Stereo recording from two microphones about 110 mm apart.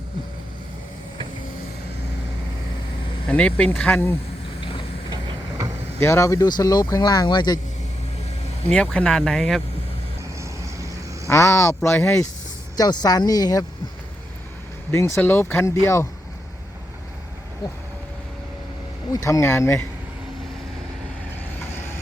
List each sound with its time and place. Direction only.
3.2 s speech: 10° left (ahead or behind)
6.0 s speech: 25° left (ahead or behind); by 7.6 s 40° left (ahead or behind)
8.7 s speech: 10° left (ahead or behind)
10.4 s duck: 30° right (ahead or behind)
11.3 s speech: 25° left (ahead or behind)
11.9 s speech: 10° left (ahead or behind)
12.7 s speech: 35° left (ahead or behind)
14.8 s speech: 25° left (ahead or behind)
19.1 s speech: 25° left (ahead or behind)